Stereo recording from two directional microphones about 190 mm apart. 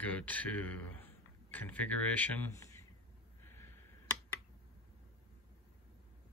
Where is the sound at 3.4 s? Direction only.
10° left (ahead or behind).